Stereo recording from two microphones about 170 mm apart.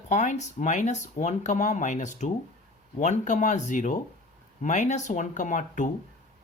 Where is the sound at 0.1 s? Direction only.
45° left (ahead or behind).